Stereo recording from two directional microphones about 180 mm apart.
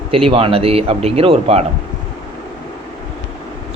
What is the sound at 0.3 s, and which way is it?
Speech, 30° right (ahead or behind).